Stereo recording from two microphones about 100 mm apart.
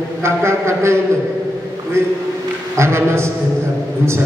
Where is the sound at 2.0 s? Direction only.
25° right (ahead or behind).